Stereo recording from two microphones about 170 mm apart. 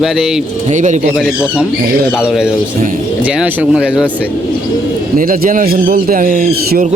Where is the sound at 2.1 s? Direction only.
5° right (ahead or behind).